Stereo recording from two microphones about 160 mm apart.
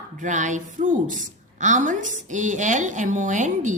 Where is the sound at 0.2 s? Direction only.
50° right (ahead or behind).